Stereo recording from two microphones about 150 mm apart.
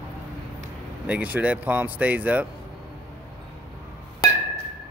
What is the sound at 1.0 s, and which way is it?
Speech, 10° right (ahead or behind).